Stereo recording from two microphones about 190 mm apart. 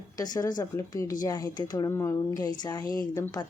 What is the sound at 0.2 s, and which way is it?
A woman's voice, 20° left (ahead or behind).